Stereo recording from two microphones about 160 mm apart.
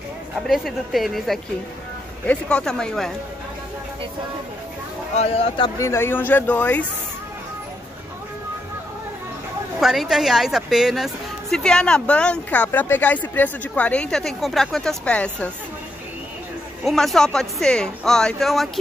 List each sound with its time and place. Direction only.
0.4 s speech: centre (ahead or behind)
5.1 s speech: 40° left (ahead or behind)
5.8 s speech: 15° left (ahead or behind)
9.8 s speech: 5° right (ahead or behind)
16.8 s speech: centre (ahead or behind)